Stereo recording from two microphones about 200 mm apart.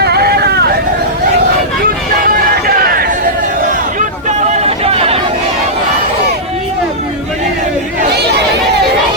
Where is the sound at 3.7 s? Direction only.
40° right (ahead or behind).